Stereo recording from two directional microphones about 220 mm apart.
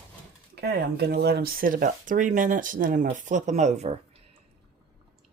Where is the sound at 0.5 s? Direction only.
45° right (ahead or behind); by 3.9 s 30° right (ahead or behind).